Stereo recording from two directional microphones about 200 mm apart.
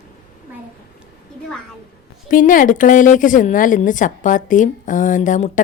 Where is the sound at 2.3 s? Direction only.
40° left (ahead or behind).